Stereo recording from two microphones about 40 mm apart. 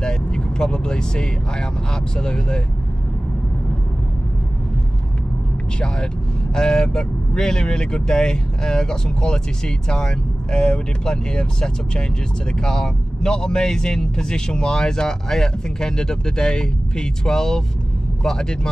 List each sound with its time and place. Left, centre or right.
0.0 s speech: centre
6.5 s speech: centre